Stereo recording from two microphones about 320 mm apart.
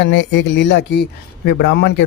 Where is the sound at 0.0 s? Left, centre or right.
Left.